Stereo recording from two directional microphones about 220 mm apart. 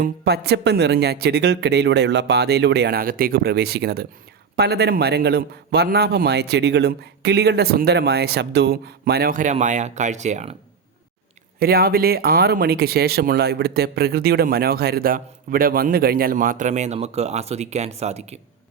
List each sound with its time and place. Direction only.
0.0 s speech: 45° right (ahead or behind)
11.6 s speech: 45° right (ahead or behind)